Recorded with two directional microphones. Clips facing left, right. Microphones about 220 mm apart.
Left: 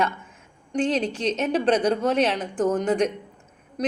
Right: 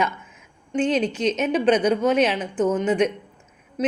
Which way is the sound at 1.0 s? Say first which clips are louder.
Right 3 dB; 30° left (ahead or behind).